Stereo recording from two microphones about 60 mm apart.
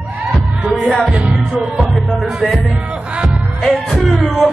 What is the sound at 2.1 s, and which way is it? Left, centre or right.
Music, centre.